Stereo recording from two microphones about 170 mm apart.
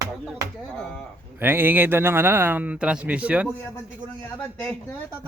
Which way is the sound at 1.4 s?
10° right (ahead or behind).